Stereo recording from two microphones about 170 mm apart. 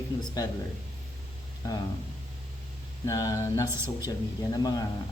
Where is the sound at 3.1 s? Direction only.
20° left (ahead or behind).